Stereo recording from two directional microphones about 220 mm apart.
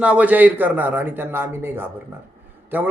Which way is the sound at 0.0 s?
5° right (ahead or behind).